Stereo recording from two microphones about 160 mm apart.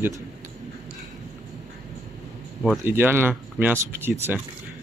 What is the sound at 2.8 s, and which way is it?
Speech, 15° right (ahead or behind).